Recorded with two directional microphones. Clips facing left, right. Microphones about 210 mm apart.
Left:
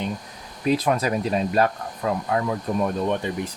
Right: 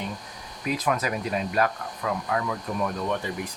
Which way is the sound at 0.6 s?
30° left (ahead or behind).